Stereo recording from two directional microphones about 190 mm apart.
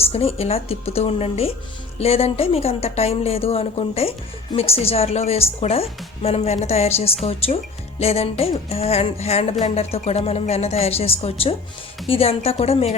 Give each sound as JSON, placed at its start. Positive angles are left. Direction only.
{"t": 0.1, "sound": "a woman's voice", "side_deg": 30}